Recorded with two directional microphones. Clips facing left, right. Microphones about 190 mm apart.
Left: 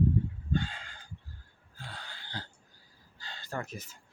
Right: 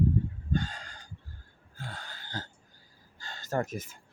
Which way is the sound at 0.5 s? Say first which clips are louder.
Right 1 dB; 45° right (ahead or behind).